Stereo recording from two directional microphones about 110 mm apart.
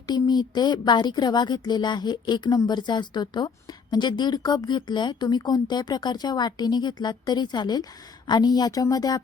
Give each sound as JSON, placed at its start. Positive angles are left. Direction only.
{"t": 0.1, "sound": "speech", "side_deg": 40}